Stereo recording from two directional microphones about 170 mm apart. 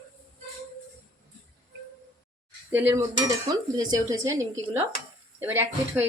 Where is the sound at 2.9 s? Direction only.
20° right (ahead or behind).